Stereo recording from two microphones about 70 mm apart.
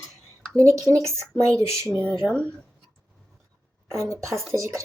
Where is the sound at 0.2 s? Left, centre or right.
Right.